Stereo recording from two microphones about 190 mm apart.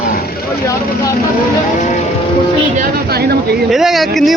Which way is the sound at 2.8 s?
55° right (ahead or behind).